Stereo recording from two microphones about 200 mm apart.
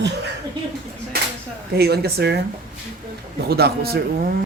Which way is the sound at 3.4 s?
50° right (ahead or behind).